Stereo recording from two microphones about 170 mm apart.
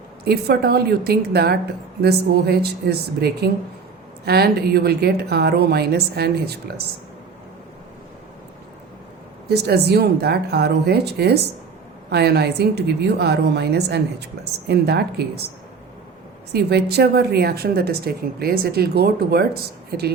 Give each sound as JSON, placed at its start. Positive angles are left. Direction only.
{"t": 0.3, "sound": "a woman's voice", "side_deg": -70}
{"t": 9.5, "sound": "a woman's voice", "side_deg": -70}
{"t": 16.5, "sound": "a woman's voice", "side_deg": -70}